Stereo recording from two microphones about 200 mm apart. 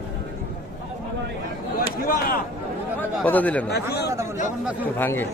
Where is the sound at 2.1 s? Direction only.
45° left (ahead or behind).